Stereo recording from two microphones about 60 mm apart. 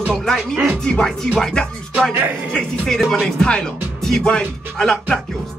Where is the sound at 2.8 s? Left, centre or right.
Centre.